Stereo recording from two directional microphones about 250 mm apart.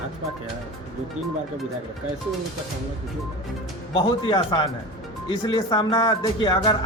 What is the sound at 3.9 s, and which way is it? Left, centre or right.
Speech, left.